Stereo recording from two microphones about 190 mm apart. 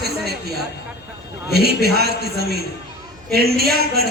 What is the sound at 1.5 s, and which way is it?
A man's voice, 60° right (ahead or behind).